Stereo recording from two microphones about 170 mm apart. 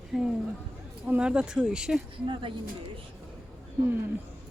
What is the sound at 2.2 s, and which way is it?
Speech, 30° right (ahead or behind).